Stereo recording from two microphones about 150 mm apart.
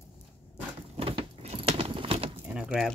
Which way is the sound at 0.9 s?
40° right (ahead or behind).